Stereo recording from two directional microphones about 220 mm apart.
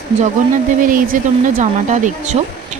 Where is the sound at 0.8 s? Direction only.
40° right (ahead or behind).